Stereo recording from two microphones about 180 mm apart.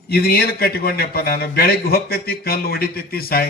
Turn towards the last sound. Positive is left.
turn(degrees=55)  # may be behind; listen again after turning